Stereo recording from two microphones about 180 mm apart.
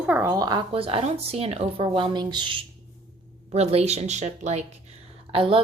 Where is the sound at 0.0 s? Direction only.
15° right (ahead or behind).